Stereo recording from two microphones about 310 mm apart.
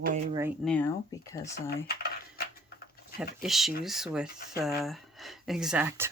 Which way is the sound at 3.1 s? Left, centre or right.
Centre.